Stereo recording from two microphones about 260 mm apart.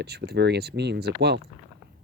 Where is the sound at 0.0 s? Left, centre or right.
Right.